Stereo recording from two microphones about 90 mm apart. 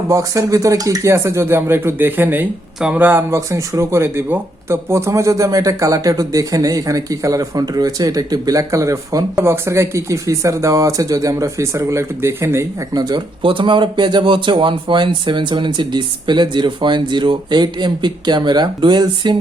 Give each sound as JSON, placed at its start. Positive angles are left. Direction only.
{"t": 0.1, "sound": "speech", "side_deg": -40}
{"t": 9.3, "sound": "speech", "side_deg": -30}
{"t": 12.9, "sound": "speech", "side_deg": -50}
{"t": 13.4, "sound": "speech", "side_deg": -70}